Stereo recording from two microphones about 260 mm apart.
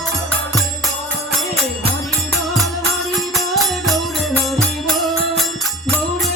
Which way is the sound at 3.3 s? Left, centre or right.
Centre.